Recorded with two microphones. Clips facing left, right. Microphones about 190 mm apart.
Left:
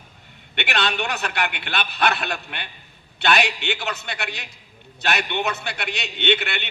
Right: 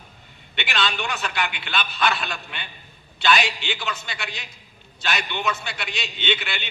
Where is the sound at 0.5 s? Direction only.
60° left (ahead or behind).